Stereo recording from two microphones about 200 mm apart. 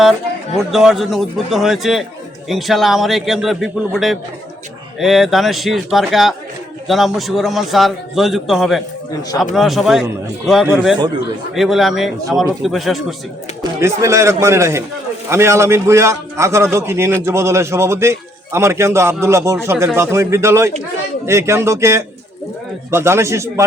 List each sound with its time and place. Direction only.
0.7 s a man's voice: centre (ahead or behind)
13.6 s a man's voice: 15° right (ahead or behind)